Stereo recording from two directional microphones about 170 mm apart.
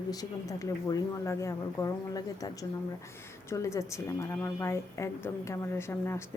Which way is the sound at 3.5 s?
15° left (ahead or behind).